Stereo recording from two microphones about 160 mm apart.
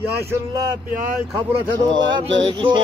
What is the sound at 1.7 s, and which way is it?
Speech, 30° right (ahead or behind).